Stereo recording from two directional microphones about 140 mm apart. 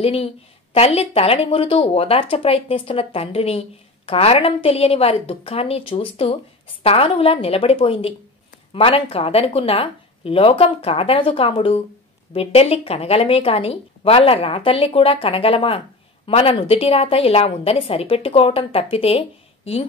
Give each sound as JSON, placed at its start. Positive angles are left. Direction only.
{"t": 0.0, "sound": "speech", "side_deg": 45}